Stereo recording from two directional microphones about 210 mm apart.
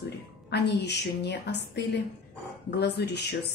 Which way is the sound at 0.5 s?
55° left (ahead or behind).